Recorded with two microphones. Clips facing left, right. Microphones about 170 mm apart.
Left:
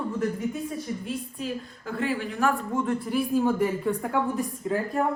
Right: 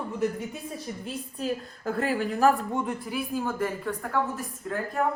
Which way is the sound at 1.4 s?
40° right (ahead or behind).